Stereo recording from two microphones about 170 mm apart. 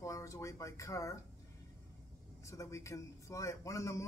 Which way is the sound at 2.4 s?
20° left (ahead or behind).